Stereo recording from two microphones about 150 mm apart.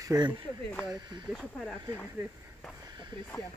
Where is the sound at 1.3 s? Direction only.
Centre (ahead or behind).